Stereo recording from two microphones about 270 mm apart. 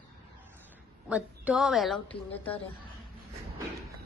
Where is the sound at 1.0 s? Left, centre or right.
Centre.